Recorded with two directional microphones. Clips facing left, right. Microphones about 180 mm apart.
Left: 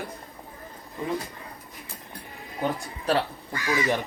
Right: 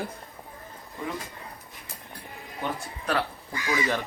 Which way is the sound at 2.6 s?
35° left (ahead or behind).